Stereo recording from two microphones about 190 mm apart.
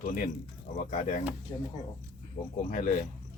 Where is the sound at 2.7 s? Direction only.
45° left (ahead or behind).